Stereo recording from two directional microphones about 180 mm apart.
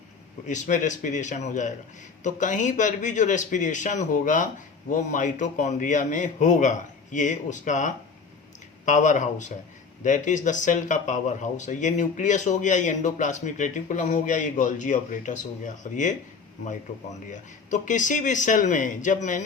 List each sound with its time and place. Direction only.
0.4 s speech: 45° left (ahead or behind)
17.3 s speech: 45° left (ahead or behind)